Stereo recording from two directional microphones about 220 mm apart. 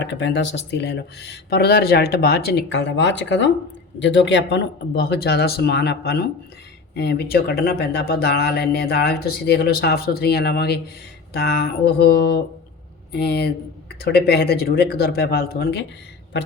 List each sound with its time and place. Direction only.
0.0 s speech: 55° left (ahead or behind)